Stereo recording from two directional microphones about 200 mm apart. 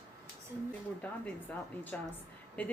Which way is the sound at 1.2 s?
5° left (ahead or behind).